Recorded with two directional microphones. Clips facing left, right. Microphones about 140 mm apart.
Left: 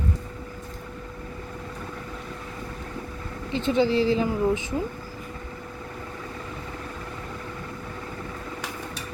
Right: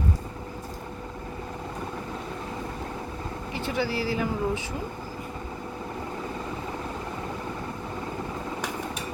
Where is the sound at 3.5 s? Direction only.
20° left (ahead or behind).